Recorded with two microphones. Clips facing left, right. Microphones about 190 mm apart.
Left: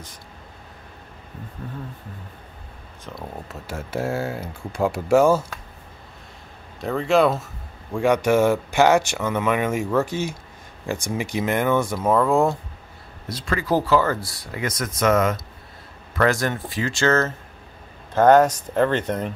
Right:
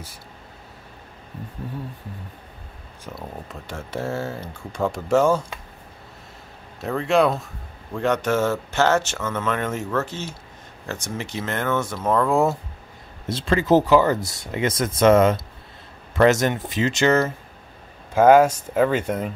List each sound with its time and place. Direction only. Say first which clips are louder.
3.6 s speech: left 2 dB; 10° left (ahead or behind)
6.8 s speech: left 1 dB; centre (ahead or behind)
13.3 s speech: right 5 dB; 25° right (ahead or behind); by 19.3 s 5° right (ahead or behind)